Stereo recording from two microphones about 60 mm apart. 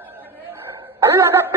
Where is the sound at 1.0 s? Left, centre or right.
Right.